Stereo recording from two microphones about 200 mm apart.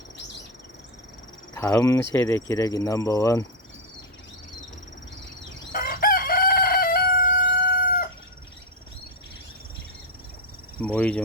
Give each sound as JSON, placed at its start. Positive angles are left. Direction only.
{"t": 1.5, "sound": "speech", "side_deg": 15}
{"t": 5.7, "sound": "crowing", "side_deg": 45}
{"t": 10.8, "sound": "speech", "side_deg": 5}